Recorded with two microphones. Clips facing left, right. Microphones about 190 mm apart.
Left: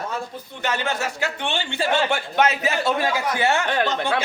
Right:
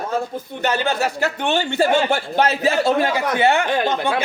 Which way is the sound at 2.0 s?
35° right (ahead or behind).